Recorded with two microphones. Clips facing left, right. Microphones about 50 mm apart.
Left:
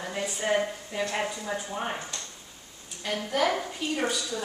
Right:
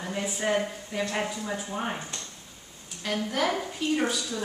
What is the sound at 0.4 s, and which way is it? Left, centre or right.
Speech, centre.